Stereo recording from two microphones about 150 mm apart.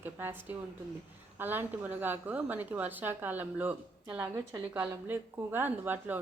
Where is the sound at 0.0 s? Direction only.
15° right (ahead or behind).